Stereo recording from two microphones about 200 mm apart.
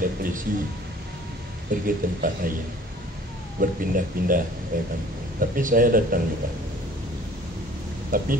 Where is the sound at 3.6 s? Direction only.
45° right (ahead or behind).